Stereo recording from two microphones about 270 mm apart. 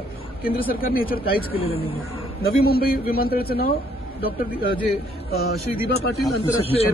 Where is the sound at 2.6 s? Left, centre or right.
Left.